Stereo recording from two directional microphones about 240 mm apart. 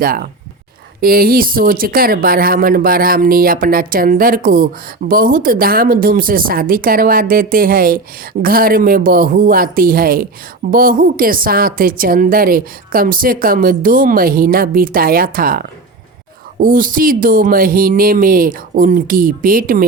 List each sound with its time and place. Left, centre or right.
0.0 s speech: right